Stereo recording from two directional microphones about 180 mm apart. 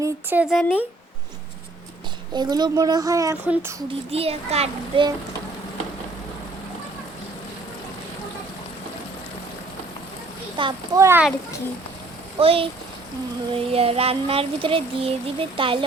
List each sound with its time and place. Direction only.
0.0 s speech: 10° right (ahead or behind)
2.3 s a child's voice: 25° right (ahead or behind)
4.1 s a sound: 35° right (ahead or behind)
10.6 s a child's voice: 25° right (ahead or behind)
11.0 s speech: 10° right (ahead or behind)
12.4 s a sound: 30° right (ahead or behind)